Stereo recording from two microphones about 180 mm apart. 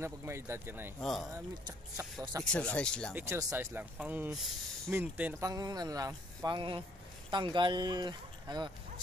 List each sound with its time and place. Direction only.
0.0 s speech: 15° right (ahead or behind)
1.0 s speech: centre (ahead or behind)
1.3 s speech: 20° right (ahead or behind)
2.4 s speech: 5° left (ahead or behind)
3.2 s speech: 15° right (ahead or behind)
5.5 s speech: 20° right (ahead or behind)